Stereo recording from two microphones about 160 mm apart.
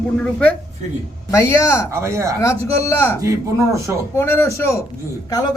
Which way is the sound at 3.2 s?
20° right (ahead or behind).